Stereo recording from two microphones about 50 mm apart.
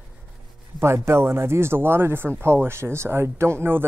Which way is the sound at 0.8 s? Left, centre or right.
Right.